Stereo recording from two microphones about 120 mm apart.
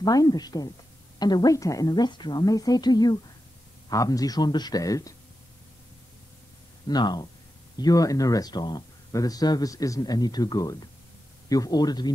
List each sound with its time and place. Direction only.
0.0 s speech: 30° left (ahead or behind)
6.9 s speech: 35° left (ahead or behind)